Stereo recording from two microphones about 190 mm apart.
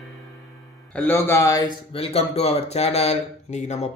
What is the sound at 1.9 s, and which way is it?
Speech, 30° left (ahead or behind).